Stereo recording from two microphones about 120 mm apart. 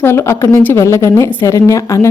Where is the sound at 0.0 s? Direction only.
20° left (ahead or behind).